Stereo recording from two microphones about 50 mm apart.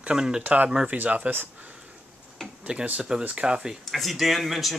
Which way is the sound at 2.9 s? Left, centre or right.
Centre.